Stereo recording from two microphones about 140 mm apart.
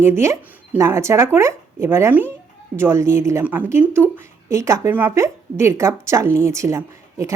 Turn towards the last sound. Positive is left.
turn(degrees=-20)  # may be behind; listen again after turning